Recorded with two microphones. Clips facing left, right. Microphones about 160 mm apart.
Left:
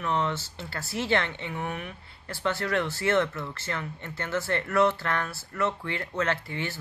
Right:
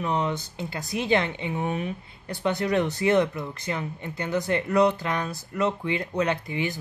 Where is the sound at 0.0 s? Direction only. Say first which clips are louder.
Right 2 dB; 15° right (ahead or behind).